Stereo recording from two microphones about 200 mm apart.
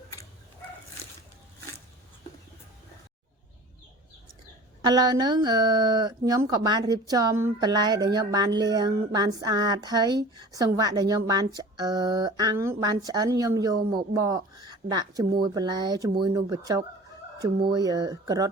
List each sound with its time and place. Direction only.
4.9 s speech: 20° right (ahead or behind)